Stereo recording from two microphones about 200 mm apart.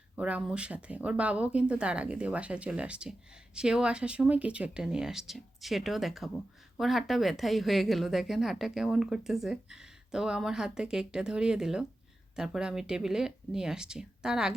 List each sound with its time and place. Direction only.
0.2 s speech: 5° right (ahead or behind)